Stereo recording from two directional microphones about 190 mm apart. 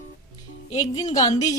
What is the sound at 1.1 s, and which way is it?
Speech, 20° left (ahead or behind).